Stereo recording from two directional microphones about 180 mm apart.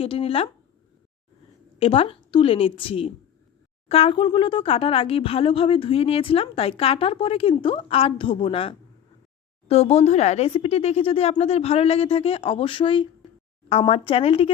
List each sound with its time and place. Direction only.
0.0 s speech: 30° left (ahead or behind)
1.8 s a woman's voice: 30° left (ahead or behind)